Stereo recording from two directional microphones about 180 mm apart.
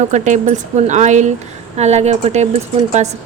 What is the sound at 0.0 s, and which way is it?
Speech, 40° right (ahead or behind).